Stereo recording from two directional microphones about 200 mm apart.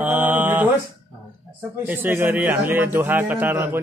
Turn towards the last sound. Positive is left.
turn(degrees=-10)  # may be behind; listen again after turning